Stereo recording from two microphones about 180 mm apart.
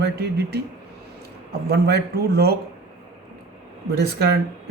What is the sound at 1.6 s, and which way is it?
Speech, 65° right (ahead or behind).